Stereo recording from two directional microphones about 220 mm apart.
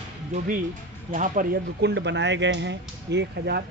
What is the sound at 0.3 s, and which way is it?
A man's voice, 30° right (ahead or behind).